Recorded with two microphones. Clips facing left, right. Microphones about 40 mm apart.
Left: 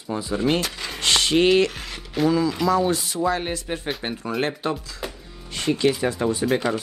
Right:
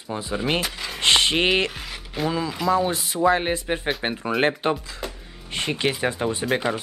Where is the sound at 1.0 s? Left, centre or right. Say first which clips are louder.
Left 1 dB; right.